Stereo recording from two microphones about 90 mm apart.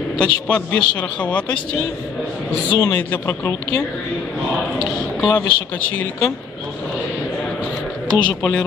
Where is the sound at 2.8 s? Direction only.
20° left (ahead or behind).